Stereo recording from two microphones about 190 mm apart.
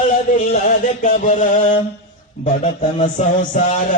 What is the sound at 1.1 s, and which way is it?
A man's voice, 40° left (ahead or behind).